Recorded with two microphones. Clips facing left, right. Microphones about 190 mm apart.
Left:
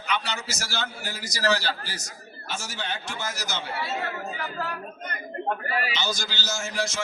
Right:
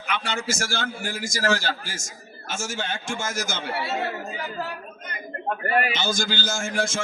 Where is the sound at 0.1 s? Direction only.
50° right (ahead or behind).